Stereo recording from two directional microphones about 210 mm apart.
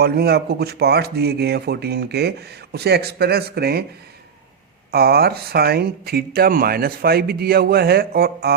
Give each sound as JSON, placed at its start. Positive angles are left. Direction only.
{"t": 0.0, "sound": "speech", "side_deg": -50}
{"t": 4.9, "sound": "speech", "side_deg": -45}